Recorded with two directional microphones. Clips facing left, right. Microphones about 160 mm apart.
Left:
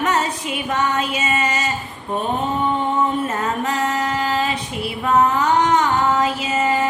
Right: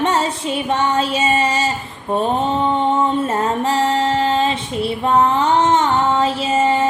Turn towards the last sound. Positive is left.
turn(degrees=-25)  # may be behind; listen again after turning